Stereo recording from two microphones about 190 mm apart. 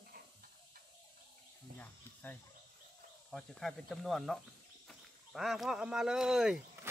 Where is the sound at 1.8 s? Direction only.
10° left (ahead or behind).